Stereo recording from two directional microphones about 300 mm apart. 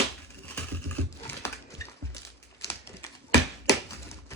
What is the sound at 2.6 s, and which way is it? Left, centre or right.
Pigeon, centre.